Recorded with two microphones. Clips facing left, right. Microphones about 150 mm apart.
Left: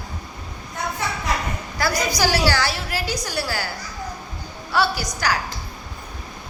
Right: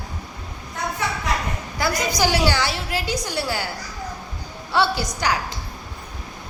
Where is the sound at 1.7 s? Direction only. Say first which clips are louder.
Even; 20° right (ahead or behind).